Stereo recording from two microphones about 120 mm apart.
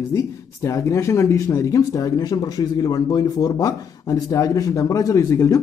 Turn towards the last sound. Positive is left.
turn(degrees=30)  # may be behind; listen again after turning